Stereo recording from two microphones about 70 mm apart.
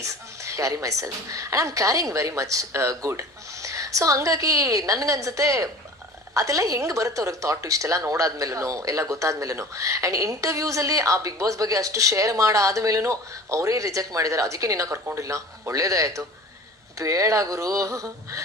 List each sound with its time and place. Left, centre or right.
0.0 s a woman's voice: right